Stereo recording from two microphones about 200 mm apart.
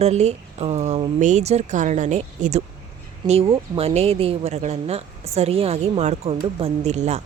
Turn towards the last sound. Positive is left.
turn(degrees=-35)  # may be behind; listen again after turning